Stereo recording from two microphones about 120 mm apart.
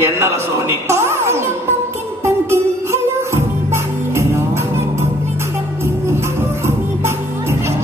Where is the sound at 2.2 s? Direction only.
20° right (ahead or behind).